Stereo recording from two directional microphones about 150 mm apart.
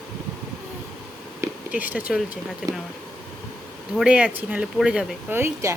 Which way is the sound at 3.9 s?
5° right (ahead or behind).